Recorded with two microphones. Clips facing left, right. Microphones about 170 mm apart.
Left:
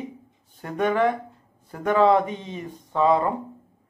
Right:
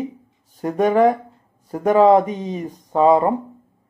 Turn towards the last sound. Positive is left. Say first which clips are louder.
# right 6 dB
turn(degrees=-40)  # may be behind; listen again after turning